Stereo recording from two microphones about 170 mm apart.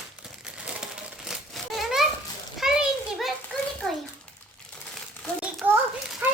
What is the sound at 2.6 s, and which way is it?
Children playing, 5° right (ahead or behind).